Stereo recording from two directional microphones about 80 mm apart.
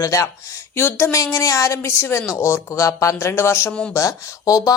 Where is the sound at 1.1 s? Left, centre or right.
Left.